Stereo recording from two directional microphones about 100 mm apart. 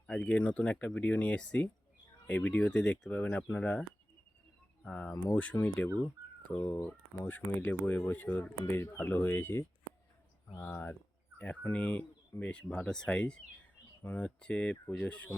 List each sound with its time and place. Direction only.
0.1 s speech: 10° left (ahead or behind)